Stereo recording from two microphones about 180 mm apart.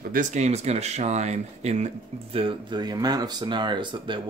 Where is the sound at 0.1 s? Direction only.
45° right (ahead or behind).